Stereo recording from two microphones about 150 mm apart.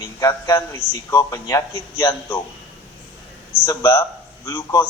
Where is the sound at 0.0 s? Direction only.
20° left (ahead or behind).